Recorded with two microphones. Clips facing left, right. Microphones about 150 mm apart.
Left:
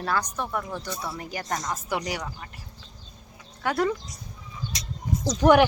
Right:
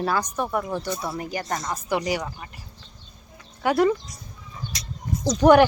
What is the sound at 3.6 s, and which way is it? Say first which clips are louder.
Speech: right 5 dB; 10° right (ahead or behind).